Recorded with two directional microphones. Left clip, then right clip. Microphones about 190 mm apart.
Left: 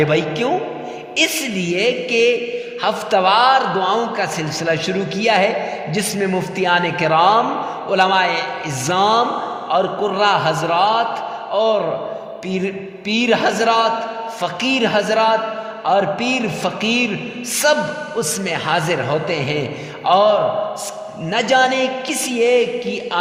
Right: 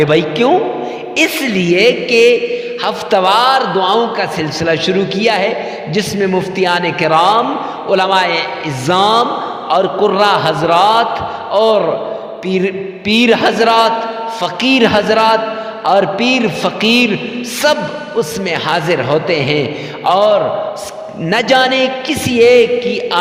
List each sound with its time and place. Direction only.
0.0 s a man's voice: 25° right (ahead or behind)
20.1 s a man's voice: 35° right (ahead or behind)